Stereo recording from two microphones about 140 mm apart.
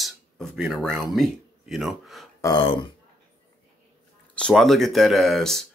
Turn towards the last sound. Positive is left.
turn(degrees=0)  # may be behind; listen again after turning